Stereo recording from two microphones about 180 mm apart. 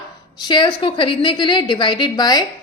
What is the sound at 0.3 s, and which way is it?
A woman's voice, 25° left (ahead or behind).